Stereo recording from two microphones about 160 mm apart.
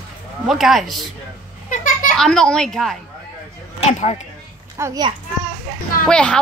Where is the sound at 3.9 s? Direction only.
45° left (ahead or behind).